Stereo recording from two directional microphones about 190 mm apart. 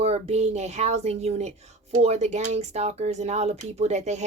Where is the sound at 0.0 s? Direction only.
35° right (ahead or behind).